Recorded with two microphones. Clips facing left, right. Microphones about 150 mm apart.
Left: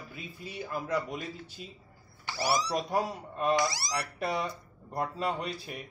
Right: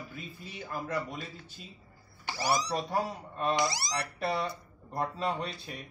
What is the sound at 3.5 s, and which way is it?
Speech, 20° right (ahead or behind).